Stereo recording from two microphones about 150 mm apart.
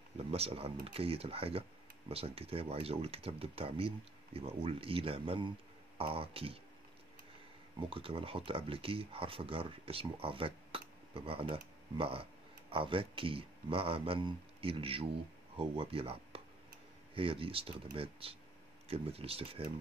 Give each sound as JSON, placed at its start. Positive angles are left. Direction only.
{"t": 0.3, "sound": "speech", "side_deg": -40}
{"t": 7.8, "sound": "speech", "side_deg": -35}